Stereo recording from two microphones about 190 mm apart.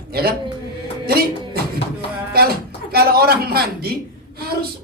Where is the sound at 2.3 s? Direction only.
55° right (ahead or behind).